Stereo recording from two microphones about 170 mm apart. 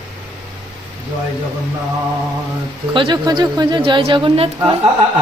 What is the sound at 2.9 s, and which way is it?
A woman's voice, 30° right (ahead or behind).